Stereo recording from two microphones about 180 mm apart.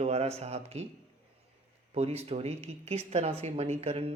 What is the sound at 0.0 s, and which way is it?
Mantra, 35° right (ahead or behind).